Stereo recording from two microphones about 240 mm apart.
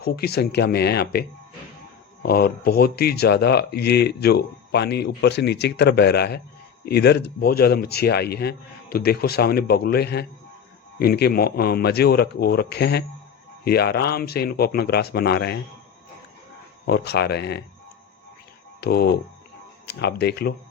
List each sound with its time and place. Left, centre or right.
0.0 s speech: left
2.2 s speech: left
16.8 s speech: left
18.8 s speech: left